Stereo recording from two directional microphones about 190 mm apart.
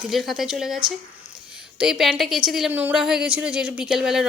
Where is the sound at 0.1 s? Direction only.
Centre (ahead or behind).